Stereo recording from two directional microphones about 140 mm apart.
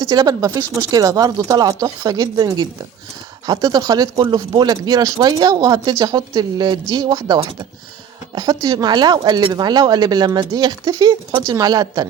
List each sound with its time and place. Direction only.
0.1 s speech: 30° right (ahead or behind)